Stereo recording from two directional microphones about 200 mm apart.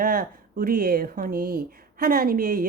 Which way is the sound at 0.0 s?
45° right (ahead or behind).